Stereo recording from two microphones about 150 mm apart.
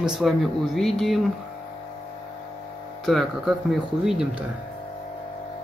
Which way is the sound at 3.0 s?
Centre (ahead or behind).